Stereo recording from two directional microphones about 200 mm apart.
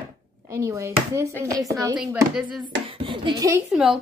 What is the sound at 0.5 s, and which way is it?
A woman's voice, 15° right (ahead or behind).